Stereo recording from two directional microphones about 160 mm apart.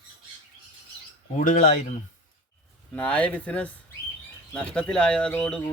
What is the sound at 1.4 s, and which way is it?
Speech, 55° left (ahead or behind).